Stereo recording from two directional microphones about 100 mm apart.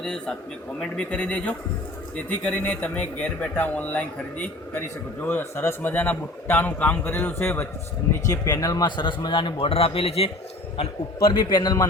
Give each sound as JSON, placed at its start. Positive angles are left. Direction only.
{"t": 0.0, "sound": "a man's voice", "side_deg": 5}
{"t": 8.1, "sound": "speech", "side_deg": 35}
{"t": 11.3, "sound": "speech", "side_deg": 45}